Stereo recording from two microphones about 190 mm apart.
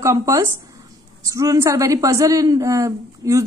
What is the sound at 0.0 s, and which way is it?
Speech, 15° right (ahead or behind).